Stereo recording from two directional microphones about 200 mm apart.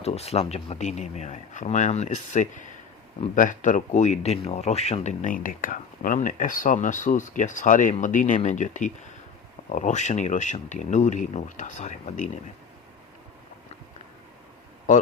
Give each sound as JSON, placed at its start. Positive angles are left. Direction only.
{"t": 0.0, "sound": "speech", "side_deg": 30}